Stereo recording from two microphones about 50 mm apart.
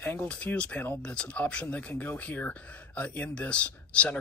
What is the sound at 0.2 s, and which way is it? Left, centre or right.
Speech, left.